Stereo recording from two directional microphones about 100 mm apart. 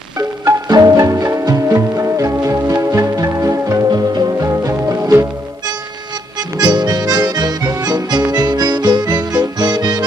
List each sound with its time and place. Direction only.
0.5 s music: 40° right (ahead or behind)
6.6 s music: 45° right (ahead or behind)